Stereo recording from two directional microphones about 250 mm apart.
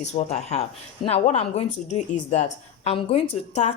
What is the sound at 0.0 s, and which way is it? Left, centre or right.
A woman's voice, left.